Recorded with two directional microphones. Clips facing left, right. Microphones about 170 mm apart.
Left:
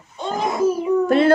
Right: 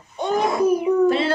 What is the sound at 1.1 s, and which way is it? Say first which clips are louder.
Speech: left 4 dB; 50° left (ahead or behind).